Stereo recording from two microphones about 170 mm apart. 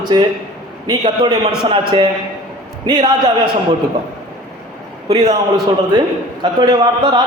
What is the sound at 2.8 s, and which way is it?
Speech, 25° right (ahead or behind).